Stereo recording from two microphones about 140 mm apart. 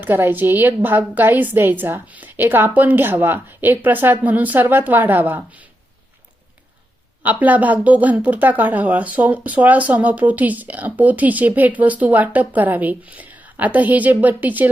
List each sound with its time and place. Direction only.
0.0 s speech: 15° right (ahead or behind)
7.2 s speech: 10° right (ahead or behind)